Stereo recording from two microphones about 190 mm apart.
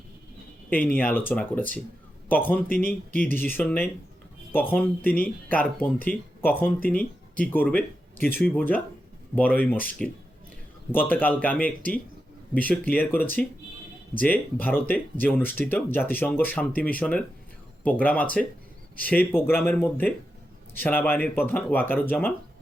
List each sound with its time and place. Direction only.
0.7 s speech: 10° left (ahead or behind)
2.6 s speech: 50° left (ahead or behind)
3.1 s speech: 10° left (ahead or behind)